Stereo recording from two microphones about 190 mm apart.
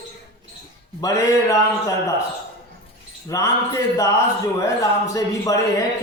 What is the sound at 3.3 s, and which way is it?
Speech, 15° left (ahead or behind).